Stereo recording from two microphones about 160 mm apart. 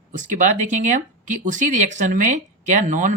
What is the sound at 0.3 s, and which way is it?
Speech, 50° right (ahead or behind).